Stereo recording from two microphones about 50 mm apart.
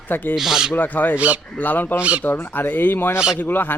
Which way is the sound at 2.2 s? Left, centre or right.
Left.